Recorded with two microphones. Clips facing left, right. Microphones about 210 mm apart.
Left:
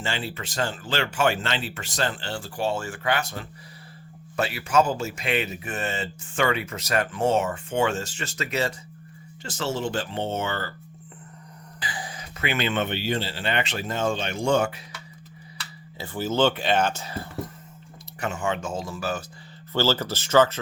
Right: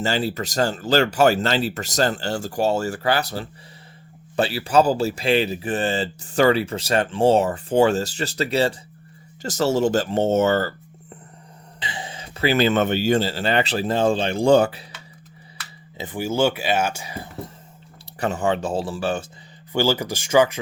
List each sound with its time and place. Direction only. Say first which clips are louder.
0.0 s speech: right 8 dB; 40° right (ahead or behind)
11.8 s speech: right 2 dB; 25° right (ahead or behind)
16.0 s speech: right 2 dB; 15° right (ahead or behind)
18.2 s speech: right 6 dB; 35° right (ahead or behind)
19.7 s speech: right 3 dB; 15° right (ahead or behind)